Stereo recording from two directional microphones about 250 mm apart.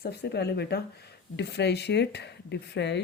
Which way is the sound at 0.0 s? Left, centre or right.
Left.